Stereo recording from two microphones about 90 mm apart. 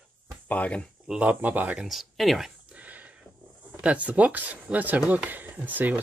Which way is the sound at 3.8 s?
15° right (ahead or behind).